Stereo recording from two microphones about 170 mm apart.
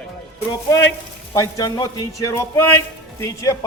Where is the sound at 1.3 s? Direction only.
20° left (ahead or behind).